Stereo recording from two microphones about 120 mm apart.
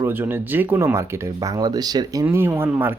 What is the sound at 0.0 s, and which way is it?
Speech, 15° right (ahead or behind).